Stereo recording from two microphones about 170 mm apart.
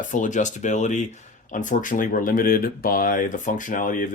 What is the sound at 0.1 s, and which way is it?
Speech, 50° left (ahead or behind).